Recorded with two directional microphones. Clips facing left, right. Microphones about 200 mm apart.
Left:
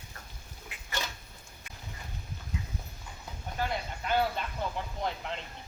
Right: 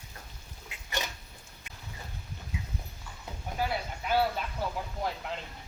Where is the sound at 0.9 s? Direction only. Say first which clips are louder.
Right 2 dB; 15° right (ahead or behind).